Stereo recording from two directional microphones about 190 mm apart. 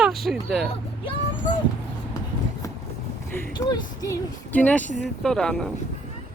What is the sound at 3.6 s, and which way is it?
Speech, 20° left (ahead or behind).